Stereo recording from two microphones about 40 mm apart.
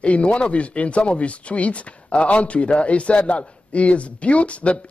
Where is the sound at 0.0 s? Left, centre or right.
Left.